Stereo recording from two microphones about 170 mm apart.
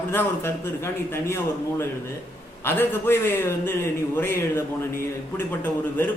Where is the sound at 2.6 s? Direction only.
15° left (ahead or behind).